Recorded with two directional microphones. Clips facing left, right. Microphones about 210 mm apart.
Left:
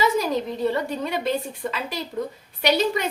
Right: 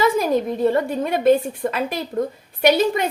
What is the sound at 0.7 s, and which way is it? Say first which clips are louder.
A woman's voice: right 5 dB; 50° right (ahead or behind).